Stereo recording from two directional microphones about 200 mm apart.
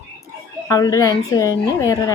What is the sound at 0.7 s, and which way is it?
Speech, 15° left (ahead or behind).